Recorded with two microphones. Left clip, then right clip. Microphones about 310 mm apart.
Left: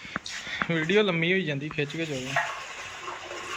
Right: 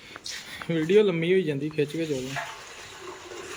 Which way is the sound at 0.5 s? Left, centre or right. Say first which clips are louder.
Right 2 dB; centre.